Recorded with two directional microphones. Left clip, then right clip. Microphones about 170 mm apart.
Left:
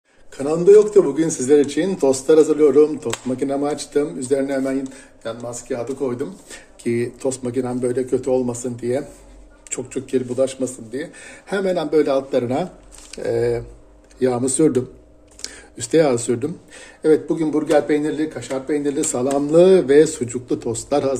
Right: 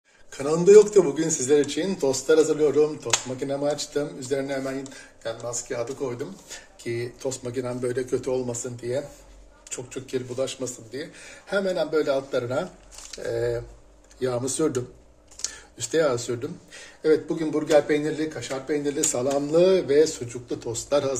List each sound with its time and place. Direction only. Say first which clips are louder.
0.3 s a man's voice: left 3 dB; centre (ahead or behind)
1.2 s speech: left 6 dB; 15° left (ahead or behind)
6.5 s speech: left 9 dB; 40° left (ahead or behind)
7.5 s a man's voice: left 4 dB; 15° left (ahead or behind)
9.7 s a man's voice: left 8 dB; 40° left (ahead or behind)
17.0 s speech: left 5 dB; 20° left (ahead or behind)
19.5 s speech: left 7 dB; 30° left (ahead or behind)
20.0 s speech: left 6 dB; 50° left (ahead or behind)
20.9 s a man's voice: left 4 dB; 20° left (ahead or behind)